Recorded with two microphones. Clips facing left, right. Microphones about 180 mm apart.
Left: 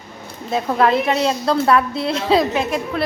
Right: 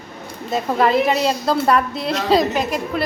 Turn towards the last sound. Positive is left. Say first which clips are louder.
# left 1 dB
turn(degrees=0)  # may be behind; listen again after turning